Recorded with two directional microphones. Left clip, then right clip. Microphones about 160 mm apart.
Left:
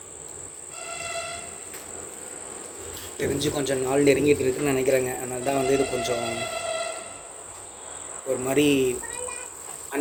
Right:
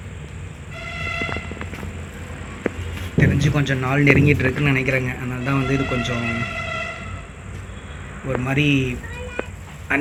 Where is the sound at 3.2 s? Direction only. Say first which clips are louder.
Right 4 dB; 20° left (ahead or behind).